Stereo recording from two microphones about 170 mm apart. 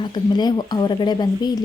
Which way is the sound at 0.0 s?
25° left (ahead or behind).